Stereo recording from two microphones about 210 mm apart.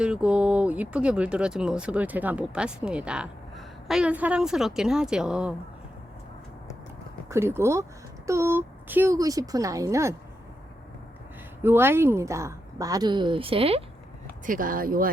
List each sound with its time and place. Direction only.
0.0 s speech: 5° right (ahead or behind)
7.3 s speech: 10° right (ahead or behind)
11.6 s speech: 10° right (ahead or behind); by 13.8 s 25° right (ahead or behind)
14.4 s speech: 40° right (ahead or behind)